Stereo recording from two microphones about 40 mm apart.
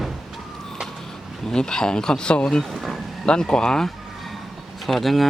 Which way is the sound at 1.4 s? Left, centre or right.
Centre.